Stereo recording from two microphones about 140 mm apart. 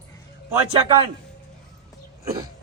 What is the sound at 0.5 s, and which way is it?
Speech, 30° right (ahead or behind).